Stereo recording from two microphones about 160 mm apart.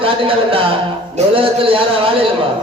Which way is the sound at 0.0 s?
35° right (ahead or behind).